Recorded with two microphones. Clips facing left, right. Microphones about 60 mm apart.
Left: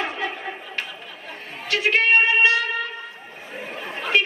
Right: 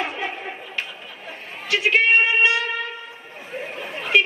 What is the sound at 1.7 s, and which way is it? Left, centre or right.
Speech, right.